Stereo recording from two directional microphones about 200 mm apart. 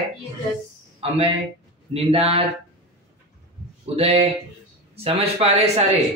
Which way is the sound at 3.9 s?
30° right (ahead or behind).